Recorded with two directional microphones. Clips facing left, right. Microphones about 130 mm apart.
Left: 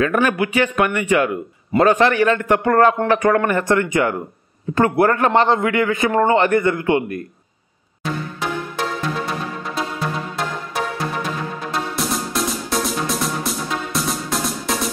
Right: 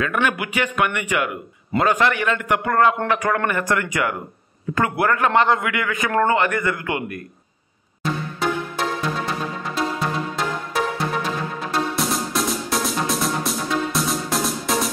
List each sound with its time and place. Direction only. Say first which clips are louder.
0.0 s a man's voice: left 5 dB; 35° left (ahead or behind)
8.0 s music: right 1 dB; centre (ahead or behind)
11.7 s music: right 1 dB; centre (ahead or behind)